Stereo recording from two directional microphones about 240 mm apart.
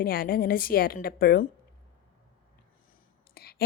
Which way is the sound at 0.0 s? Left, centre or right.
Left.